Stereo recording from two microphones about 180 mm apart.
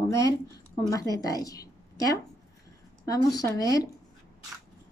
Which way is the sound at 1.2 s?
20° left (ahead or behind).